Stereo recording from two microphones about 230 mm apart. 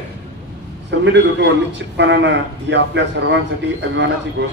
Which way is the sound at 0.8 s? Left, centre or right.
Right.